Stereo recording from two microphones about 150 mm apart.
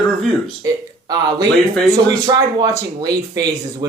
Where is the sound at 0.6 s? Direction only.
25° right (ahead or behind).